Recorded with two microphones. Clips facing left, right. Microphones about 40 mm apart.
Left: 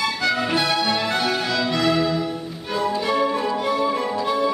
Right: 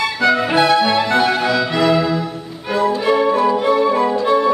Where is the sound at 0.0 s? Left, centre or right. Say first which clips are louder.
Right 6 dB; centre.